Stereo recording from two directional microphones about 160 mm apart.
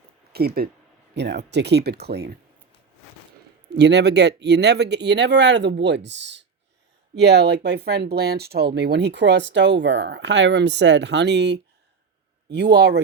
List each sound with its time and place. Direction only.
0.3 s speech: 75° right (ahead or behind)
1.1 s speech: 90° right
3.8 s speech: 90° right